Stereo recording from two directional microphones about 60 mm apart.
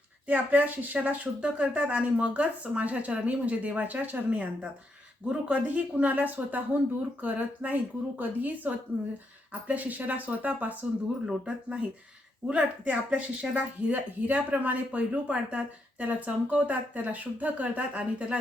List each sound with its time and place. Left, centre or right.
0.3 s speech: right